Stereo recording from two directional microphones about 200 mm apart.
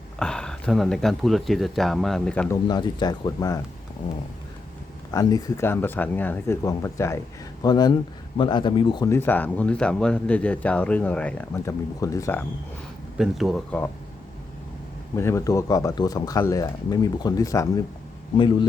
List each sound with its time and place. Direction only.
0.2 s speech: 5° left (ahead or behind)
2.6 s speech: 20° left (ahead or behind)
5.1 s speech: 15° left (ahead or behind)
13.1 s speech: centre (ahead or behind)
15.1 s speech: 15° left (ahead or behind)